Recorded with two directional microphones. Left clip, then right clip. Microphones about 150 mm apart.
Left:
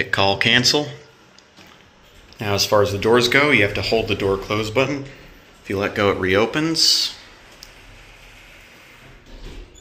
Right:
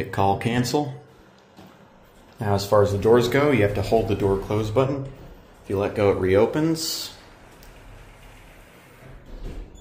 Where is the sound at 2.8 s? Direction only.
10° right (ahead or behind).